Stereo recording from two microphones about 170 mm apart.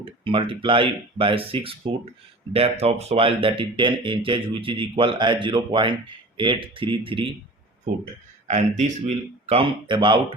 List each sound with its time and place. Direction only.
0.0 s speech: 30° right (ahead or behind)
8.4 s speech: 40° right (ahead or behind)